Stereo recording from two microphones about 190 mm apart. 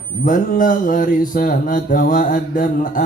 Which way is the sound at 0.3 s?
45° left (ahead or behind).